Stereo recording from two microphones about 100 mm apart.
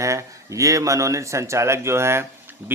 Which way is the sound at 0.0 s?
30° right (ahead or behind).